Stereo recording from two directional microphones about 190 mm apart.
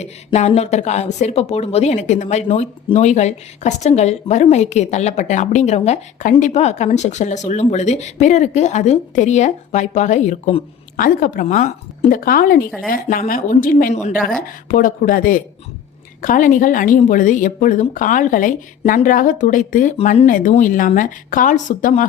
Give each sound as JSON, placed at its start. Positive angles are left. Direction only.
{"t": 0.3, "sound": "a woman's voice", "side_deg": 35}